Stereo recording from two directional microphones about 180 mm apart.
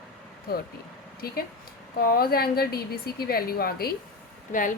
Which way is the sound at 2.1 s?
55° left (ahead or behind).